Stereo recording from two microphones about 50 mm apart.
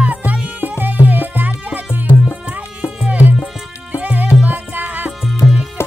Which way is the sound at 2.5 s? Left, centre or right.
Right.